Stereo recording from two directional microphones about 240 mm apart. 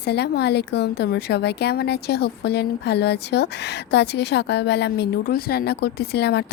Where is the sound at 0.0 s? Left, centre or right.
Left.